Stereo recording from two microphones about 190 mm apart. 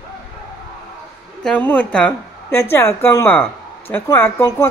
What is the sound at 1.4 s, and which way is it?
A woman's voice, 5° left (ahead or behind).